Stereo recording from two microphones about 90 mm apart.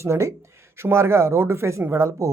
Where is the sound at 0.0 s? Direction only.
35° right (ahead or behind).